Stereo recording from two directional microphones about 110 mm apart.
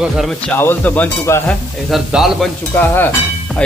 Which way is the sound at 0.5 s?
20° left (ahead or behind).